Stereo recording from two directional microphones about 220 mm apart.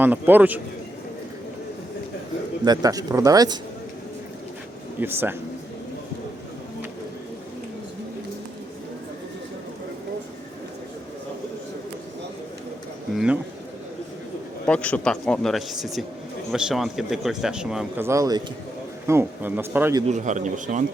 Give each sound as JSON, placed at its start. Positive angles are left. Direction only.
{"t": 0.0, "sound": "speech", "side_deg": -10}
{"t": 2.6, "sound": "speech", "side_deg": -15}
{"t": 4.9, "sound": "speech", "side_deg": -10}
{"t": 13.1, "sound": "a man's voice", "side_deg": -5}
{"t": 14.7, "sound": "a man's voice", "side_deg": 5}
{"t": 20.1, "sound": "a man's voice", "side_deg": -35}